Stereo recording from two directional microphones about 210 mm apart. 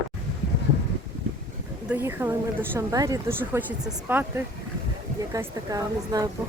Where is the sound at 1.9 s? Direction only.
10° right (ahead or behind).